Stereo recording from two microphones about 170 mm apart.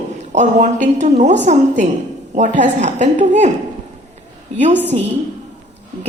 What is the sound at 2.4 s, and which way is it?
Speech, 45° right (ahead or behind).